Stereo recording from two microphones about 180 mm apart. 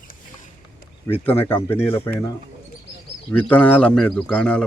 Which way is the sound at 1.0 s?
10° left (ahead or behind).